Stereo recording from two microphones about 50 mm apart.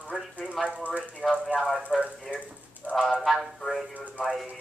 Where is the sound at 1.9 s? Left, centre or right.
Centre.